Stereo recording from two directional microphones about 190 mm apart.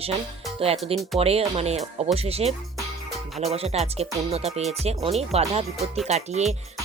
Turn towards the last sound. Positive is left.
turn(degrees=-35)  # may be behind; listen again after turning